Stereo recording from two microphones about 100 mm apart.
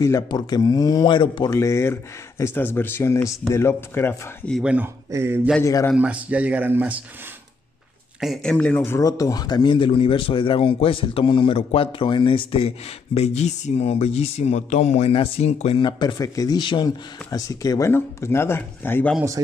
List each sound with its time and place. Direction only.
0.0 s speech: 40° left (ahead or behind); by 1.5 s 55° left (ahead or behind)
1.5 s speech: 30° left (ahead or behind)
4.6 s speech: 10° right (ahead or behind)
4.8 s a man's voice: 25° right (ahead or behind)
5.6 s speech: 35° left (ahead or behind)
5.9 s speech: 15° right (ahead or behind)
8.2 s speech: 5° left (ahead or behind)
8.9 s a man's voice: 35° left (ahead or behind); by 15.8 s 85° left
15.8 s speech: 50° left (ahead or behind)
16.2 s speech: 35° left (ahead or behind)
16.5 s speech: 50° left (ahead or behind); by 19.1 s 20° left (ahead or behind)